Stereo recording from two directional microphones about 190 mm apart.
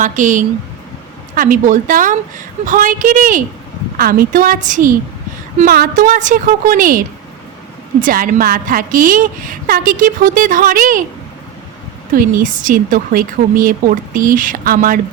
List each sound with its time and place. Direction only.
0.0 s a woman's voice: 40° right (ahead or behind)
8.0 s a woman's voice: 45° right (ahead or behind)
12.1 s a woman's voice: 45° right (ahead or behind)